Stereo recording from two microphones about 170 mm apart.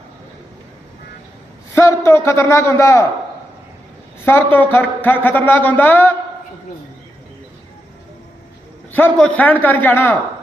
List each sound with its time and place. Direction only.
1.7 s speech: 15° left (ahead or behind)
4.5 s speech: 10° left (ahead or behind)
8.9 s speech: 10° left (ahead or behind)